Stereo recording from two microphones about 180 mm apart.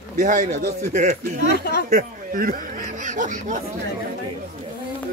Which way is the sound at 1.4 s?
60° left (ahead or behind).